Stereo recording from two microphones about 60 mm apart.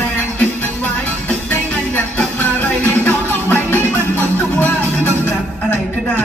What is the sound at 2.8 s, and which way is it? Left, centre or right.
Music, left.